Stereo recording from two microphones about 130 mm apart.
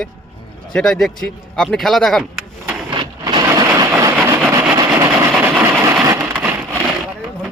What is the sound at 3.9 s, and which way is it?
Vehicle, 20° right (ahead or behind).